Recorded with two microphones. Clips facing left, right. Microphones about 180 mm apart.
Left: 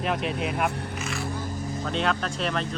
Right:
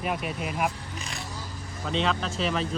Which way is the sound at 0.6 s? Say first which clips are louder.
Left 3 dB; 60° left (ahead or behind).